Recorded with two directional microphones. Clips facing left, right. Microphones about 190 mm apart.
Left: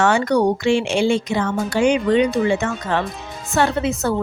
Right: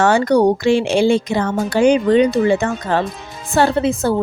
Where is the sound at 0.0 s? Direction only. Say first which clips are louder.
Right 3 dB; 35° right (ahead or behind).